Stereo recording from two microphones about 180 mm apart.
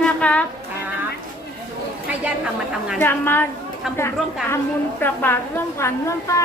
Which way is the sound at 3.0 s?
10° left (ahead or behind).